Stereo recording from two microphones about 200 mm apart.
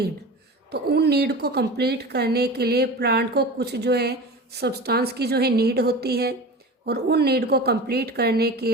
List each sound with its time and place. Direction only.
0.7 s a woman's voice: 55° right (ahead or behind)